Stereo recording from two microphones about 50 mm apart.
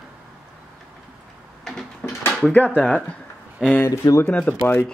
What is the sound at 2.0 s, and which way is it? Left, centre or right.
Drawer open or close, left.